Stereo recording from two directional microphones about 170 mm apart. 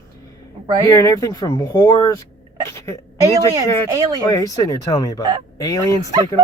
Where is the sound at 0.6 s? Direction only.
25° right (ahead or behind).